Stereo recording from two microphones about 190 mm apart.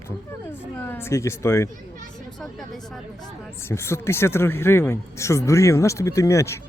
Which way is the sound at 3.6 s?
15° left (ahead or behind).